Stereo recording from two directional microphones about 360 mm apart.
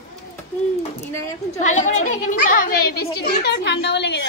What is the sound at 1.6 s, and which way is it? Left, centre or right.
A child's voice, centre.